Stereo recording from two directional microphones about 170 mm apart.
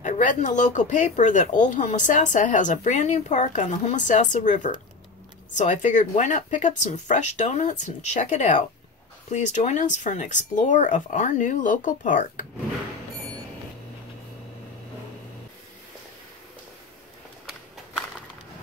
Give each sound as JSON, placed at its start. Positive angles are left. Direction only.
{"t": 0.0, "sound": "speech", "side_deg": 45}